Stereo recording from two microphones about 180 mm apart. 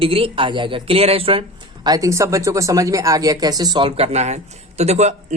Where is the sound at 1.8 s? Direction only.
20° right (ahead or behind).